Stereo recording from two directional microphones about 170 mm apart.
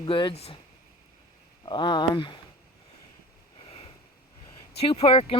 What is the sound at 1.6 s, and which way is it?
Speech, 25° left (ahead or behind).